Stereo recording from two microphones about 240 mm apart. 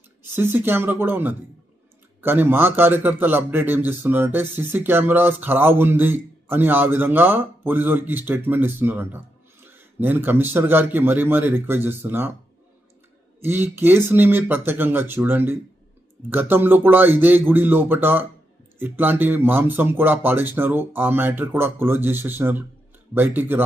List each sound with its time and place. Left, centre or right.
0.2 s a man's voice: centre
13.4 s a man's voice: centre